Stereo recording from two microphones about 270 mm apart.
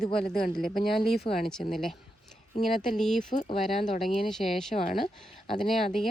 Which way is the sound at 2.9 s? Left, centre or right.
Centre.